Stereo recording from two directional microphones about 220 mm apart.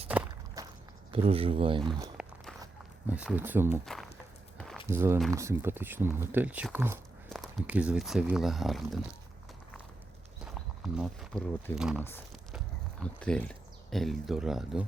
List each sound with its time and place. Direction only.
0.6 s walk: 15° right (ahead or behind)
1.1 s speech: 25° right (ahead or behind)
2.1 s walk: centre (ahead or behind)
3.1 s speech: 5° right (ahead or behind)
4.5 s walk: centre (ahead or behind)
4.9 s speech: 10° right (ahead or behind)
10.4 s speech: 5° right (ahead or behind)